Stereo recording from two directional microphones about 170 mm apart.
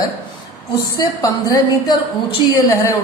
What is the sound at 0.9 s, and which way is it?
A man's voice, 20° left (ahead or behind).